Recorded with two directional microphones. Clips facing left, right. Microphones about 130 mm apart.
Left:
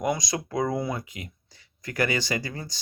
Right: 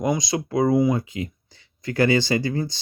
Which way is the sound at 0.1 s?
25° right (ahead or behind).